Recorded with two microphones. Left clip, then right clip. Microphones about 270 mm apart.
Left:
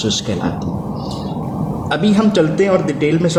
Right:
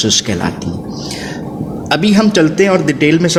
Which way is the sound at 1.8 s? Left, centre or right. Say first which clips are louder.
Right 4 dB; right.